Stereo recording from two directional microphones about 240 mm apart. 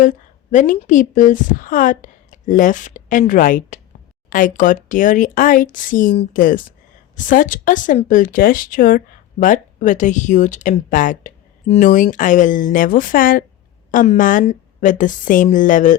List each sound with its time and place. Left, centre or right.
0.0 s a woman's voice: left